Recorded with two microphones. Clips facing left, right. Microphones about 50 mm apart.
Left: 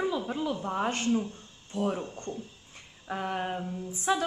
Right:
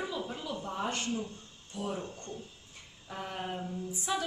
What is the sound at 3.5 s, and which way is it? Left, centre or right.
Speech, centre.